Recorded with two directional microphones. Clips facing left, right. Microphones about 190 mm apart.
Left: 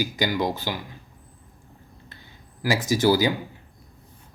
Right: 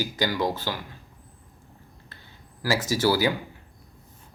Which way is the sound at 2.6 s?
15° left (ahead or behind).